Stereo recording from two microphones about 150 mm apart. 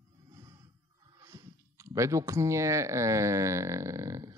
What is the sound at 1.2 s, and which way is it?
Speech, 20° right (ahead or behind).